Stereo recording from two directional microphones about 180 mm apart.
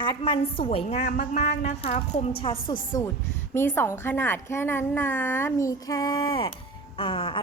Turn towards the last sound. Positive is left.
turn(degrees=30)  # may be behind; listen again after turning